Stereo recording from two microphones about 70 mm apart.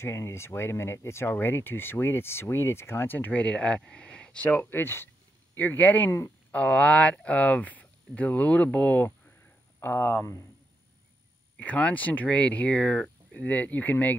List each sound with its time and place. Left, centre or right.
0.0 s speech: left; by 4.5 s centre
4.5 s speech: left
6.0 s speech: left
6.5 s speech: centre; by 10.4 s left
11.5 s speech: centre